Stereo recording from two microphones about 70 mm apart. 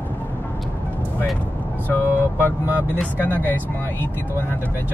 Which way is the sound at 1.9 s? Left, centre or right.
Left.